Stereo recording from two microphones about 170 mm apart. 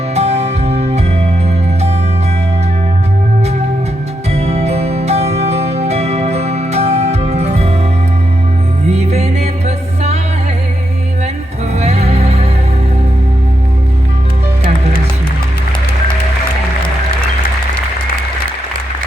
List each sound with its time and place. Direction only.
0.1 s music: 40° right (ahead or behind)
4.3 s music: 40° right (ahead or behind)
8.9 s music: 40° right (ahead or behind)
11.7 s music: 40° right (ahead or behind)